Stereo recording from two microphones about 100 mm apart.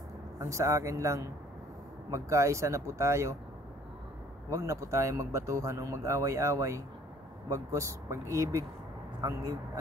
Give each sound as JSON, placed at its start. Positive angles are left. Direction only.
{"t": 0.4, "sound": "speech", "side_deg": -30}
{"t": 4.5, "sound": "speech", "side_deg": -30}